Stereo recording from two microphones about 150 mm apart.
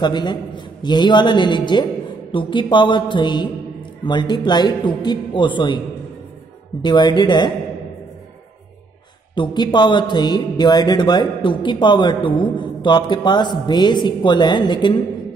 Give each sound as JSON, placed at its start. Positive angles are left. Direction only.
{"t": 0.0, "sound": "a man's voice", "side_deg": 30}
{"t": 6.8, "sound": "speech", "side_deg": 30}
{"t": 9.3, "sound": "speech", "side_deg": 30}